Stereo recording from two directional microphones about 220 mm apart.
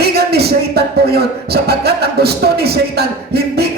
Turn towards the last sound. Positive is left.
turn(degrees=-45)  # may be behind; listen again after turning